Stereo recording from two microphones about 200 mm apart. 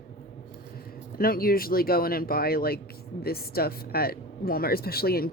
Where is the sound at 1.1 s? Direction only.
45° left (ahead or behind).